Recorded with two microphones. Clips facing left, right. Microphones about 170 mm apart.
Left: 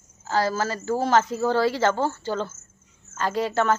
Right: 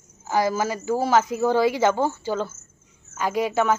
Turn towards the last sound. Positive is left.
turn(degrees=-10)  # may be behind; listen again after turning